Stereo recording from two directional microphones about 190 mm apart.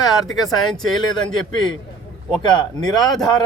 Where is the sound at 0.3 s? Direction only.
Centre (ahead or behind).